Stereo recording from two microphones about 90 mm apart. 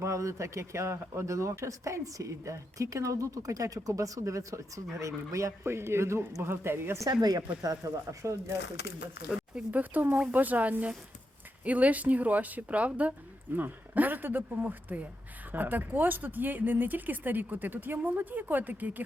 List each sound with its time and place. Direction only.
0.0 s speech: 35° right (ahead or behind)
7.1 s speech: 45° right (ahead or behind)
9.3 s speech: 15° right (ahead or behind)